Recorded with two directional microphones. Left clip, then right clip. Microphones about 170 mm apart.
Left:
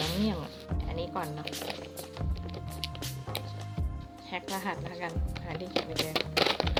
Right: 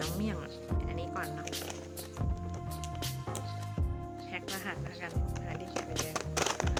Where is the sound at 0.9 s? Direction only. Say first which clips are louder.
Left 5 dB; 20° right (ahead or behind).